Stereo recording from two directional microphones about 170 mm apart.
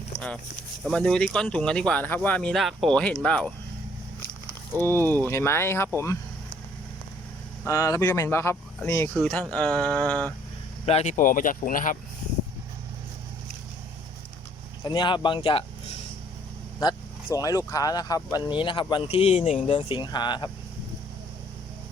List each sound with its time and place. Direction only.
0.9 s speech: 5° left (ahead or behind)
4.9 s speech: 10° left (ahead or behind)
7.6 s speech: 15° left (ahead or behind)
9.1 s speech: 5° left (ahead or behind)
10.8 s speech: 40° left (ahead or behind)
14.8 s speech: 30° left (ahead or behind)
17.2 s speech: 20° left (ahead or behind); by 19.7 s 40° left (ahead or behind)
19.7 s speech: 30° left (ahead or behind)